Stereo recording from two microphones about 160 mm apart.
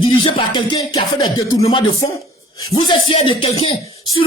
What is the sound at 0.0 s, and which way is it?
Speech, 35° left (ahead or behind).